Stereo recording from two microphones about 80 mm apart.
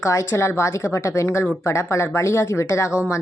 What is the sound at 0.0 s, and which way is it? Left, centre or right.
Speech, left.